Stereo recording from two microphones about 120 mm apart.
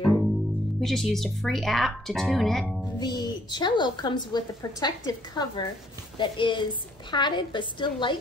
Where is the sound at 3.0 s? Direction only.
35° left (ahead or behind).